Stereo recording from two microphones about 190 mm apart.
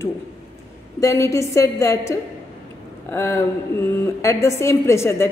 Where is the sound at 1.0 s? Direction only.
15° left (ahead or behind).